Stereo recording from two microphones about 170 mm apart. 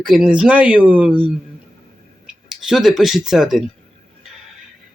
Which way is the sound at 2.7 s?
Centre (ahead or behind).